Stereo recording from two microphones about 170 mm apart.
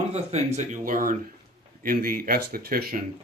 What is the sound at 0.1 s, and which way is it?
Speech, 40° right (ahead or behind).